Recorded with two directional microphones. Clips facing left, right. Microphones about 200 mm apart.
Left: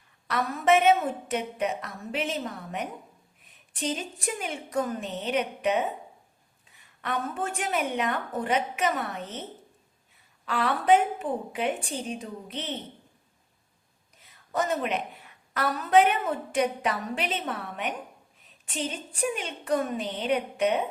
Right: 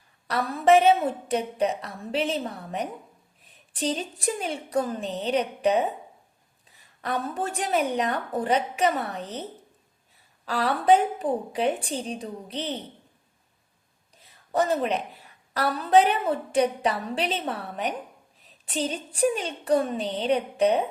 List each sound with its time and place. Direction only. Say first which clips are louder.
0.3 s a woman's voice: right 3 dB; 35° right (ahead or behind)
14.2 s a woman's voice: right 4 dB; 35° right (ahead or behind)